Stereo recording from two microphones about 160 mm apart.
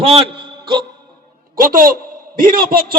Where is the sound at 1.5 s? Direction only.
60° right (ahead or behind).